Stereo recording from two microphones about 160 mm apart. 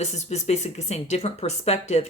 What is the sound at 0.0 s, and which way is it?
Speech, 45° left (ahead or behind).